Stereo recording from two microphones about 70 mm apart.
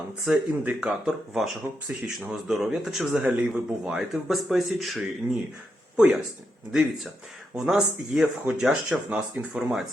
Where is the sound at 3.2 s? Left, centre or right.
Centre.